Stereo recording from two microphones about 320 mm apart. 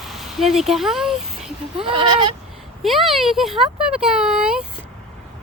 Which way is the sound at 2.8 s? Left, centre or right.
Centre.